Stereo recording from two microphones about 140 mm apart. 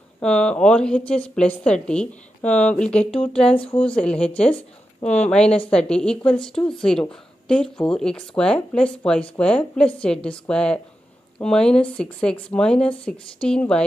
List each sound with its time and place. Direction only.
0.2 s speech: 5° left (ahead or behind)
3.5 s speech: 40° left (ahead or behind)
3.9 s speech: 5° left (ahead or behind)